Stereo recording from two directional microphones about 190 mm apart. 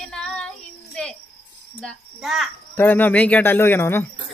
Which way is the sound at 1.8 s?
Centre (ahead or behind).